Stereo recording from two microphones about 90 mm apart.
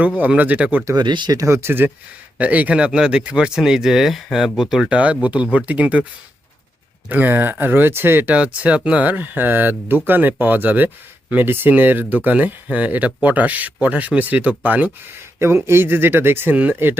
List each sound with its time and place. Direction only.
0.0 s speech: 15° right (ahead or behind)
0.9 s speech: 55° right (ahead or behind)
1.4 s speech: 30° right (ahead or behind); by 6.1 s 15° right (ahead or behind)
7.1 s speech: 20° right (ahead or behind)
15.4 s speech: 30° right (ahead or behind)